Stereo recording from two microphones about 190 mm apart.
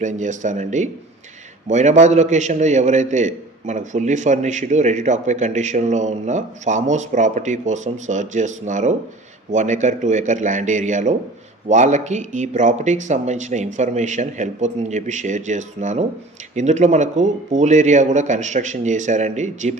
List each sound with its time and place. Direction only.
0.0 s a man's voice: 40° right (ahead or behind)